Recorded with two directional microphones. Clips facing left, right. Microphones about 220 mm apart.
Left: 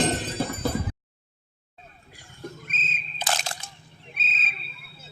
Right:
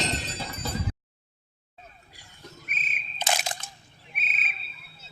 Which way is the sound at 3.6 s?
5° right (ahead or behind).